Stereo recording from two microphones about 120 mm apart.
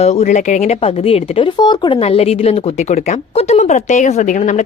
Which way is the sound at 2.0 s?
60° left (ahead or behind).